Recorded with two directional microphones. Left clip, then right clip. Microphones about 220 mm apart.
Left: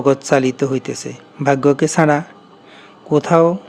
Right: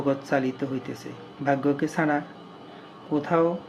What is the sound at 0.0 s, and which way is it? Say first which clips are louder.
A man's voice: left 11 dB; 50° left (ahead or behind).